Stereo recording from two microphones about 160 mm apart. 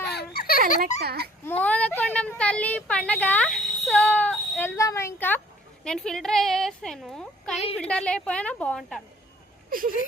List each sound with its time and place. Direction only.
0.0 s a sound: 90° left; by 0.6 s 70° left (ahead or behind)
1.0 s a child's voice: 80° right
1.5 s speech: 10° left (ahead or behind)
5.8 s a woman's voice: 5° left (ahead or behind)
9.6 s speech: 60° right (ahead or behind)